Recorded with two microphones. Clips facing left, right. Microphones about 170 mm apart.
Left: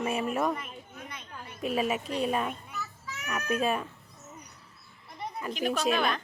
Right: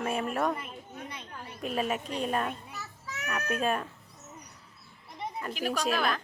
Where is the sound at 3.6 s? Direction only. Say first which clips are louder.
Even; 5° left (ahead or behind).